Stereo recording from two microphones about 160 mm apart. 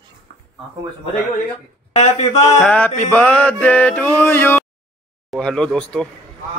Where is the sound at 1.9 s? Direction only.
45° left (ahead or behind).